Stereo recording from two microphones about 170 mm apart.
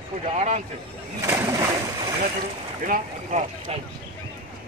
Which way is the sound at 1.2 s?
15° right (ahead or behind).